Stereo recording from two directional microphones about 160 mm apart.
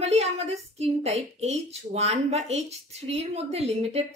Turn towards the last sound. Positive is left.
turn(degrees=-40)  # may be behind; listen again after turning